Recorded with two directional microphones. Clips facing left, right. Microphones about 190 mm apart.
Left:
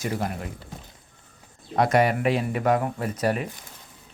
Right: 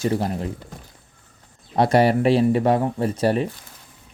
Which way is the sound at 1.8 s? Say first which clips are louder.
Right 4 dB; 30° right (ahead or behind).